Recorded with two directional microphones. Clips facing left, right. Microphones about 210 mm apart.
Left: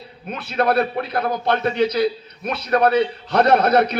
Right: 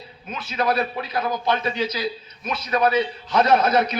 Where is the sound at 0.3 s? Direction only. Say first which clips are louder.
Left 4 dB; 60° left (ahead or behind).